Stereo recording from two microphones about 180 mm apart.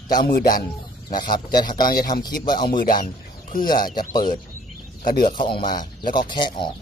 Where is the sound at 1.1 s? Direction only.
25° left (ahead or behind).